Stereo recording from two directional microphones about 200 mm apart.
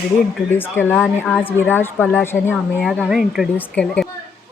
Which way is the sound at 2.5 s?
5° right (ahead or behind).